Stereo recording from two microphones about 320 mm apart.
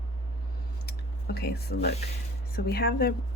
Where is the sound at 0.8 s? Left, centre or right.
Left.